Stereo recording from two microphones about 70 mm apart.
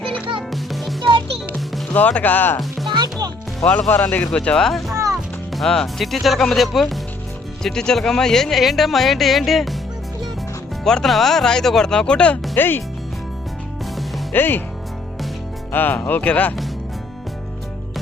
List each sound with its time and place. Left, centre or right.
0.3 s music: centre
1.9 s speech: left
2.6 s music: centre
2.9 s music: right
3.7 s speech: left; by 4.8 s centre
4.9 s music: right
5.5 s speech: centre
10.8 s speech: centre
12.5 s speech: left
14.3 s speech: left
15.7 s speech: left